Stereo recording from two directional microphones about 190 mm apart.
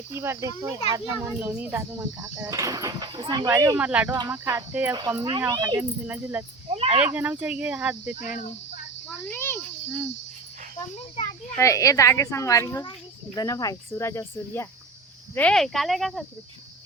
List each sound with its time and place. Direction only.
0.1 s a child's voice: 15° right (ahead or behind)
6.1 s a child's voice: 10° right (ahead or behind)
6.7 s speech: 30° right (ahead or behind)
6.9 s a child's voice: 5° right (ahead or behind)
9.0 s a child's voice: 10° left (ahead or behind)
11.5 s a child's voice: 15° left (ahead or behind); by 16.2 s centre (ahead or behind)